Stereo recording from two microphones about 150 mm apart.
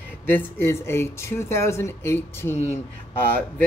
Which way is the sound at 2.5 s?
50° left (ahead or behind).